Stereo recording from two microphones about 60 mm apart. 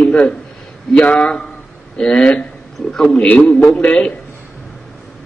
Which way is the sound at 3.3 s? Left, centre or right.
Left.